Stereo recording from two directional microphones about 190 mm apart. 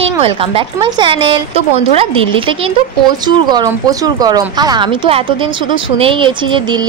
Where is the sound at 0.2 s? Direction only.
30° right (ahead or behind).